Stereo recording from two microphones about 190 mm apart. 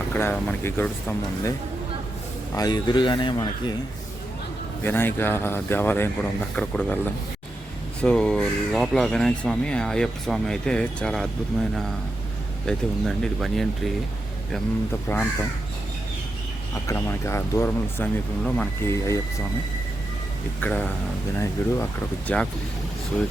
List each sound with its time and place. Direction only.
0.1 s speech: 10° left (ahead or behind)
2.6 s speech: 20° left (ahead or behind)
4.8 s speech: 10° left (ahead or behind)
12.6 s speech: centre (ahead or behind)
15.1 s speech: 10° left (ahead or behind)
16.7 s speech: 15° left (ahead or behind)
20.6 s speech: 10° left (ahead or behind)